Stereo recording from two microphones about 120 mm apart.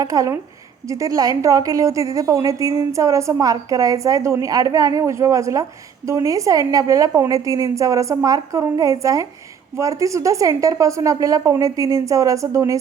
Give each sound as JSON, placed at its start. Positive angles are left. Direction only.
{"t": 0.0, "sound": "a woman's voice", "side_deg": -30}